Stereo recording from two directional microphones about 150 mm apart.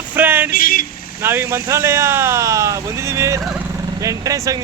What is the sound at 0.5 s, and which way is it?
Speech, 70° left (ahead or behind).